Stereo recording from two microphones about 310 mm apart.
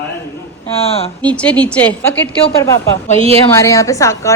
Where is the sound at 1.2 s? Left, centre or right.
Centre.